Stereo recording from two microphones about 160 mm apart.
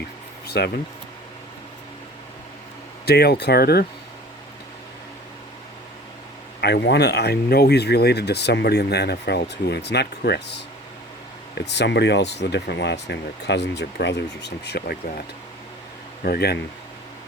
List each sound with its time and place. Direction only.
0.4 s a sound: 85° left
3.1 s speech: 90° left
6.6 s speech: 90° left
11.7 s speech: 90° left
16.2 s speech: 80° left